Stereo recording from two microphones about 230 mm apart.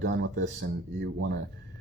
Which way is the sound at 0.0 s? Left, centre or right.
Right.